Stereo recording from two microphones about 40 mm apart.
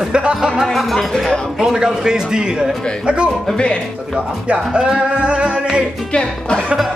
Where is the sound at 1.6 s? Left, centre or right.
Centre.